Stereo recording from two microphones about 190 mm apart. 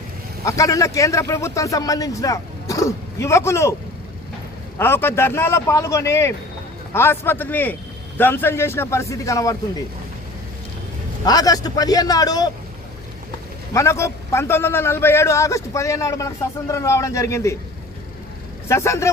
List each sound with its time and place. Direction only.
0.4 s a man's voice: 15° left (ahead or behind)
4.8 s a man's voice: 10° left (ahead or behind)
11.3 s a man's voice: 20° left (ahead or behind)
13.7 s a man's voice: 15° left (ahead or behind)
18.7 s a man's voice: 15° left (ahead or behind)